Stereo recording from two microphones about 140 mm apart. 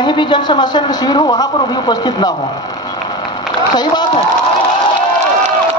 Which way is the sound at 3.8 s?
30° left (ahead or behind).